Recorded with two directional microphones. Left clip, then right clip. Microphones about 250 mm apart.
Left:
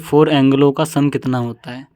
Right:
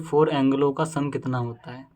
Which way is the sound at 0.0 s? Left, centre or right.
Left.